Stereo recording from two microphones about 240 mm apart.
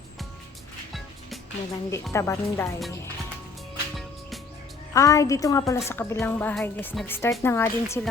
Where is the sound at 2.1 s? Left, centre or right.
Centre.